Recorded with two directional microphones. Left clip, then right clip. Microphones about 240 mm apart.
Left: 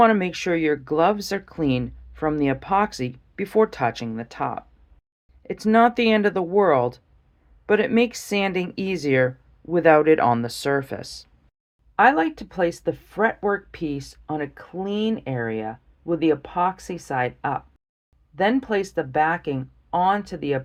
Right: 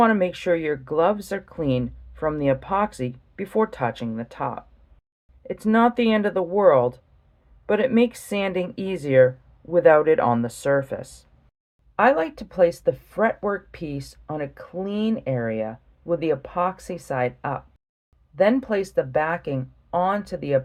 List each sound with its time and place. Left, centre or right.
0.0 s speech: left